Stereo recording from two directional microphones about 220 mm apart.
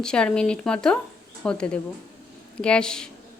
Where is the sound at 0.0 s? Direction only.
5° left (ahead or behind).